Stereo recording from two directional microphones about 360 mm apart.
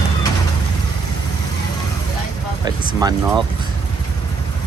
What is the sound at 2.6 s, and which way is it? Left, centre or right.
Speech, centre.